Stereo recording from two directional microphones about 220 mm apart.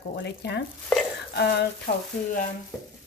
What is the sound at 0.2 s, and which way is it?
Speech, 50° left (ahead or behind).